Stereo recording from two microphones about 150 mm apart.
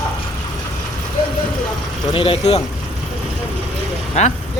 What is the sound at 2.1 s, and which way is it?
Speech, 35° left (ahead or behind).